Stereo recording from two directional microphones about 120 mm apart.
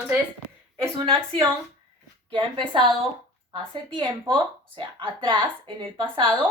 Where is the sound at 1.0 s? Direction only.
45° right (ahead or behind).